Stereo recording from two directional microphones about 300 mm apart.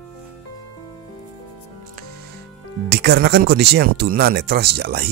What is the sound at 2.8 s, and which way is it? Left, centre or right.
Speech, right.